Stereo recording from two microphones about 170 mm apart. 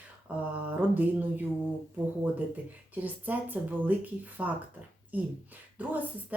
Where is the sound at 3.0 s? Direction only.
10° right (ahead or behind).